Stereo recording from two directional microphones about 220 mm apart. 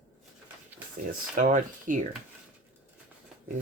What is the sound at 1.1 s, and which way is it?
Speech, 40° right (ahead or behind).